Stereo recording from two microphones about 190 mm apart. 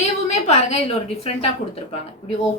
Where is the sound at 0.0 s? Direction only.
35° left (ahead or behind).